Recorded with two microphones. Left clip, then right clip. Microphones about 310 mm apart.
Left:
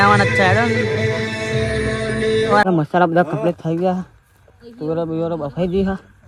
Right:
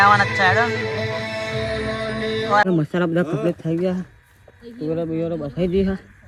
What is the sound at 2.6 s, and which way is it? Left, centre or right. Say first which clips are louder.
Speech: left 5 dB; centre.